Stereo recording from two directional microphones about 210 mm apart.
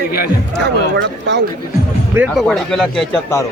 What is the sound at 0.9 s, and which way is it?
Speech, 55° right (ahead or behind).